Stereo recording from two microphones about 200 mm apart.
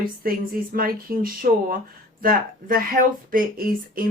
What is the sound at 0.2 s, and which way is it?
Speech, 45° right (ahead or behind).